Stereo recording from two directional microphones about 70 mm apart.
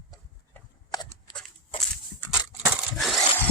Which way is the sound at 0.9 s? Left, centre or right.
Left.